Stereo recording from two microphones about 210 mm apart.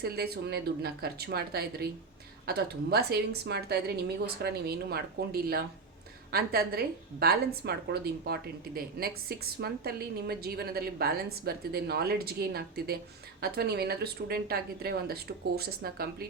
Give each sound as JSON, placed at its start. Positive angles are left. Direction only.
{"t": 0.0, "sound": "a woman's voice", "side_deg": -50}